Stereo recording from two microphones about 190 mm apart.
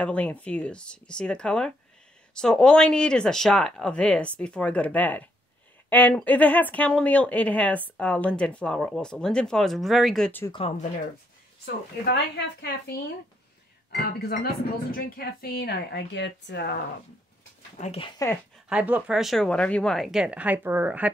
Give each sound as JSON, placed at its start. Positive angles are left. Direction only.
{"t": 0.0, "sound": "speech", "side_deg": 5}
{"t": 10.5, "sound": "speech", "side_deg": 30}
{"t": 11.6, "sound": "a woman's voice", "side_deg": 60}
{"t": 14.4, "sound": "a woman's voice", "side_deg": 50}
{"t": 17.7, "sound": "speech", "side_deg": 35}
{"t": 18.7, "sound": "speech", "side_deg": -5}